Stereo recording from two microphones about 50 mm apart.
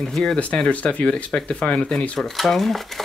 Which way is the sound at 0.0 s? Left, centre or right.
Centre.